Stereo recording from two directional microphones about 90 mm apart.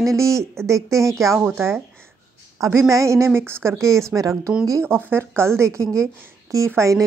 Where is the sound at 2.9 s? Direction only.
35° right (ahead or behind).